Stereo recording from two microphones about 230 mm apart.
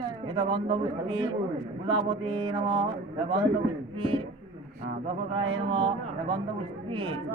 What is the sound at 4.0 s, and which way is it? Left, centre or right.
Speech, right.